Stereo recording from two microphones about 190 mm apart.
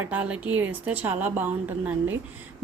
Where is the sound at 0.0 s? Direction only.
10° right (ahead or behind).